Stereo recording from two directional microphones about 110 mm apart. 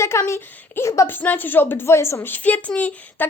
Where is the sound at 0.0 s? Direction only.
25° left (ahead or behind).